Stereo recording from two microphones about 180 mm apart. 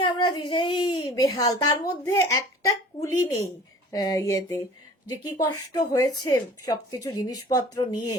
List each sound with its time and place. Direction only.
0.0 s a woman's voice: 25° left (ahead or behind)